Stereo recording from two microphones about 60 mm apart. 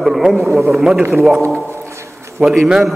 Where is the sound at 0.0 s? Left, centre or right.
Centre.